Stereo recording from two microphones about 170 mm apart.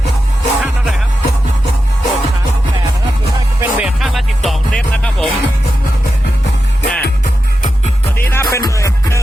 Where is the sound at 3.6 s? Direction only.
5° right (ahead or behind).